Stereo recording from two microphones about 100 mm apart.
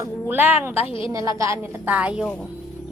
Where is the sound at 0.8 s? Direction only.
60° left (ahead or behind).